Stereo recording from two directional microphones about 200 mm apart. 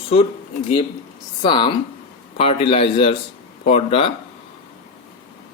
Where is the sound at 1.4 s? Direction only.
25° left (ahead or behind).